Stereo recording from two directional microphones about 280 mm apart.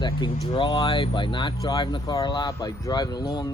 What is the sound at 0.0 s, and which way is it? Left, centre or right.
Speech, centre.